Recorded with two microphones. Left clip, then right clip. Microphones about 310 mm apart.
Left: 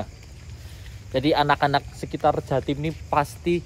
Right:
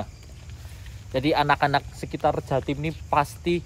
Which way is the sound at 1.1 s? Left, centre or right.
Centre.